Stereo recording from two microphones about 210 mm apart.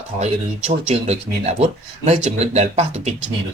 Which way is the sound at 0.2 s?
30° right (ahead or behind).